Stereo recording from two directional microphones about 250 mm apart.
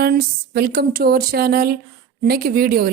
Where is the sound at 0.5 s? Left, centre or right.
Right.